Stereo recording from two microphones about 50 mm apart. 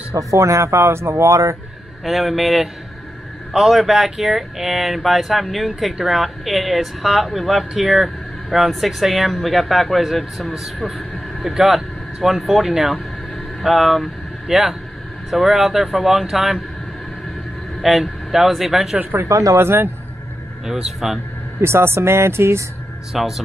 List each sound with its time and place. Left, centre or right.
0.1 s speech: right
2.0 s speech: centre
17.8 s speech: centre
19.2 s speech: right
19.6 s a man's voice: right
20.6 s speech: centre
21.5 s speech: right
23.1 s speech: centre